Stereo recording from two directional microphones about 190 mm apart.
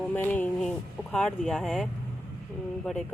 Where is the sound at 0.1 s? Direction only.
10° left (ahead or behind).